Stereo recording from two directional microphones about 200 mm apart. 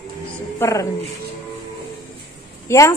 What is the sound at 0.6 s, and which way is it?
Speech, 15° left (ahead or behind).